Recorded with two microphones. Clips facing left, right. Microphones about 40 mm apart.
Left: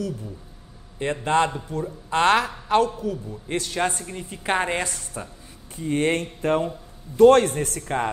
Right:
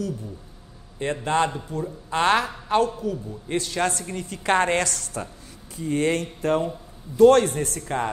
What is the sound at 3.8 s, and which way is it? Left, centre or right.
A woman's voice, left.